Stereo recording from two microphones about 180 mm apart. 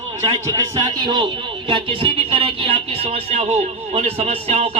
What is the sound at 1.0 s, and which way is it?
Speech, 25° right (ahead or behind).